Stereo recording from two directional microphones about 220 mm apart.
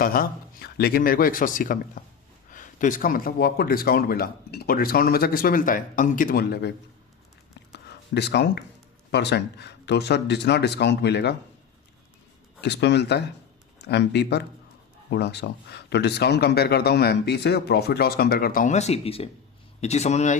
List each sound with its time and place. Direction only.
0.0 s speech: 40° left (ahead or behind)
7.9 s speech: 50° left (ahead or behind)
12.6 s speech: 50° left (ahead or behind); by 20.3 s 30° left (ahead or behind)